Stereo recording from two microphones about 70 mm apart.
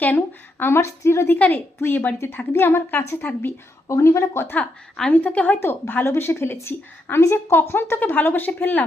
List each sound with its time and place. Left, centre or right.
0.6 s a woman's voice: left
1.4 s a woman's voice: left
4.9 s a woman's voice: centre
5.5 s a woman's voice: left